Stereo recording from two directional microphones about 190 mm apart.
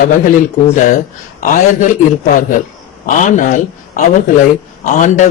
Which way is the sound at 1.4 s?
40° left (ahead or behind).